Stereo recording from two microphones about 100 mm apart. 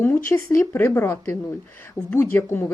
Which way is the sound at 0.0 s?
25° left (ahead or behind).